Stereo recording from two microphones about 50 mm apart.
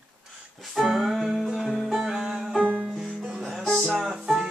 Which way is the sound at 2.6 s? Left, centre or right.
Right.